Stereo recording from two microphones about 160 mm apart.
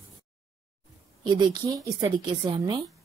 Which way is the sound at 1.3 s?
25° right (ahead or behind).